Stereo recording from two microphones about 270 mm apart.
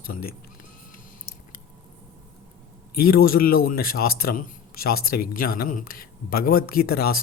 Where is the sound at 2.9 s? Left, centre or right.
Left.